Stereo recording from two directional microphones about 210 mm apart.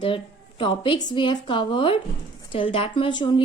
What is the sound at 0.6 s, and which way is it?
Speech, 25° left (ahead or behind).